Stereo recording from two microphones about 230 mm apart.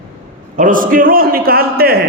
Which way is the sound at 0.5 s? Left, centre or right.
Right.